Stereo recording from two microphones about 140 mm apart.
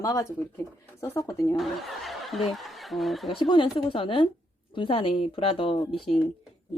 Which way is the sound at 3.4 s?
35° left (ahead or behind).